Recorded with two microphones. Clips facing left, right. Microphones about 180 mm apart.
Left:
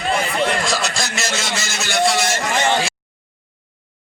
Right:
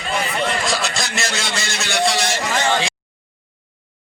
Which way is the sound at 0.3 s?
Centre (ahead or behind).